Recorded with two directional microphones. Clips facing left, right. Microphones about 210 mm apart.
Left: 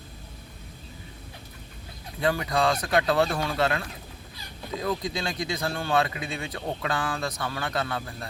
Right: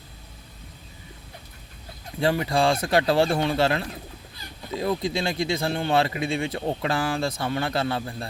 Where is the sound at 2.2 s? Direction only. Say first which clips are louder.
Right 3 dB; 30° right (ahead or behind).